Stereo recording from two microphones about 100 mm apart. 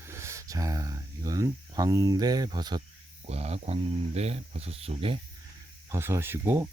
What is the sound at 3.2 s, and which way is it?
Speech, 90° right.